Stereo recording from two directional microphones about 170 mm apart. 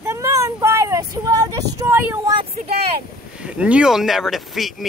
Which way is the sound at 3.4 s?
5° right (ahead or behind).